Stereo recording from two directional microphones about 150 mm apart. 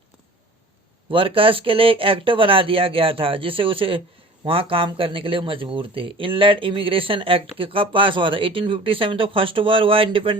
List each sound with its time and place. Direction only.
1.1 s speech: 35° right (ahead or behind)